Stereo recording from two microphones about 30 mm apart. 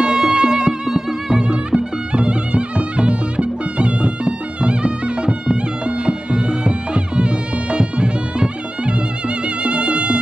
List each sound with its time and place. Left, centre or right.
0.0 s music: right
0.8 s music: centre
1.5 s music: right
9.6 s music: right